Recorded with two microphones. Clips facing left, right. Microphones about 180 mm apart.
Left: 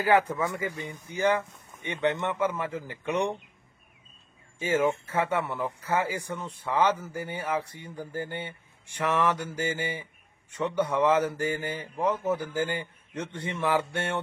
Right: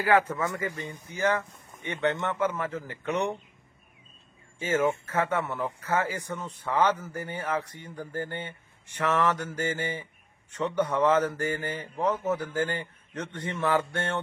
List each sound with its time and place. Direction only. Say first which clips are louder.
0.0 s speech: even; 15° left (ahead or behind)
4.6 s speech: even; 15° left (ahead or behind)